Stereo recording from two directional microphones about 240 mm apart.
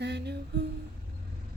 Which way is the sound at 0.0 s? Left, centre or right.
Right.